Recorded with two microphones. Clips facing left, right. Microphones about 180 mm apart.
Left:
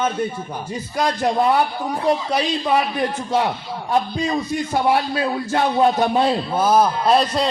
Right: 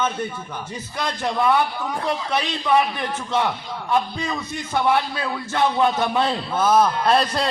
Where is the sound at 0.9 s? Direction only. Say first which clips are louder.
Left 5 dB; 35° left (ahead or behind).